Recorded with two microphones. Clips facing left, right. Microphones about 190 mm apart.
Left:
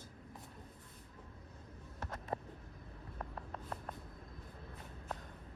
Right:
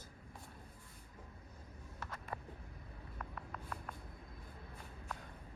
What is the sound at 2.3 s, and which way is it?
Vehicle, 25° left (ahead or behind).